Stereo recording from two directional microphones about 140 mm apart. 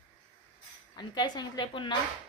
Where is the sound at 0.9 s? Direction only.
30° left (ahead or behind).